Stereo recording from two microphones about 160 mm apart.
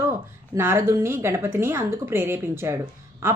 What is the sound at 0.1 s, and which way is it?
A woman's voice, 15° right (ahead or behind).